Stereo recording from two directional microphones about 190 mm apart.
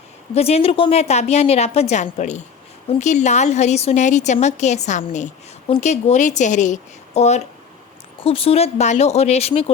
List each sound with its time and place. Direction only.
0.3 s a woman's voice: 35° left (ahead or behind)